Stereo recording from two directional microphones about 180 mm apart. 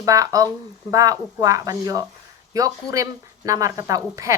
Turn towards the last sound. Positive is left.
turn(degrees=-20)  # may be behind; listen again after turning